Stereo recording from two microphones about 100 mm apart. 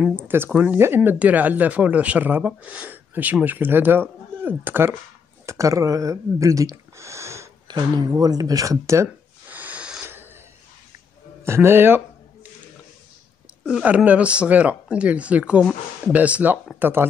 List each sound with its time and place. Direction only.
0.0 s speech: 20° right (ahead or behind)
5.5 s speech: 30° right (ahead or behind)
7.6 s speech: 45° right (ahead or behind)
9.5 s wheeze: 15° right (ahead or behind)
11.4 s speech: 25° right (ahead or behind)
13.8 s speech: 15° right (ahead or behind)